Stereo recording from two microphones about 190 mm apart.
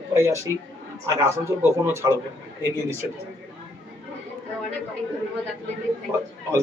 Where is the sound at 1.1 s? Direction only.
15° right (ahead or behind).